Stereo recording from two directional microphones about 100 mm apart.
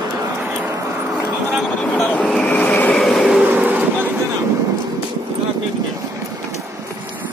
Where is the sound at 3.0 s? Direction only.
5° left (ahead or behind).